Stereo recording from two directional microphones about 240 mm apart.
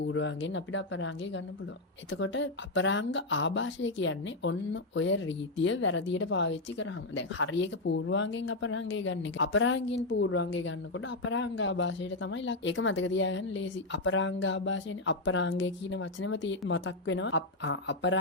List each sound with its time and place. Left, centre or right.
0.0 s a woman's voice: left